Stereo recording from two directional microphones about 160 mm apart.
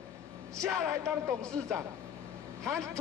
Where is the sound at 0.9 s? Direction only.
20° right (ahead or behind).